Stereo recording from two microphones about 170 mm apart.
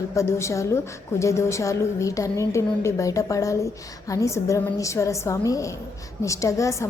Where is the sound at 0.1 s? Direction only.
15° left (ahead or behind).